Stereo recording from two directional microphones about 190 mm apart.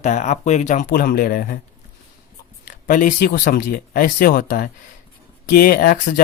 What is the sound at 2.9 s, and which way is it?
Speech, 45° left (ahead or behind).